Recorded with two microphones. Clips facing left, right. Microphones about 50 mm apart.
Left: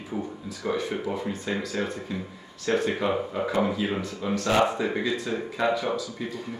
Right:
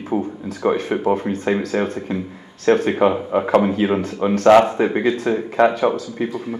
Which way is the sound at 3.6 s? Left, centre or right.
Right.